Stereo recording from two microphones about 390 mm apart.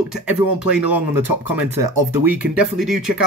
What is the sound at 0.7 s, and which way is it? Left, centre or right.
Speech, centre.